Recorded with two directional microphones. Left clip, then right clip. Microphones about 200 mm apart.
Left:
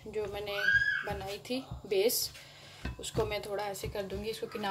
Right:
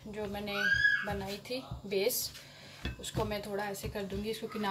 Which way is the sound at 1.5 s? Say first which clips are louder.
Left 3 dB; 35° left (ahead or behind).